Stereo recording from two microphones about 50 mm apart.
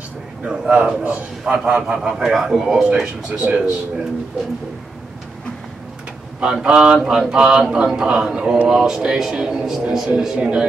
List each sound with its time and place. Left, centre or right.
0.5 s speech: centre
1.7 s a man's voice: right
2.0 s speech: centre
3.3 s a man's voice: right
6.4 s speech: centre